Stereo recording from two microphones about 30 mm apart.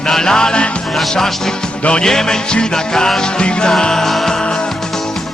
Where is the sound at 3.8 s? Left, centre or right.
Centre.